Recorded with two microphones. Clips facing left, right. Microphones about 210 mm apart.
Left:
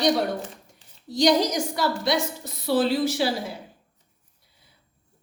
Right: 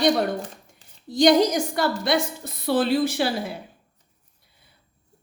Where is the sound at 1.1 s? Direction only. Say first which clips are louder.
Right 3 dB; 55° right (ahead or behind).